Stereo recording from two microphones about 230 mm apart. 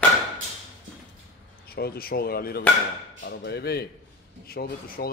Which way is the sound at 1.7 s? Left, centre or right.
Left.